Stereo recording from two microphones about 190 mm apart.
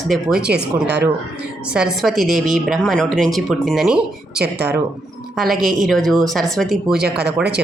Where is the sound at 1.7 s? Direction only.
5° right (ahead or behind).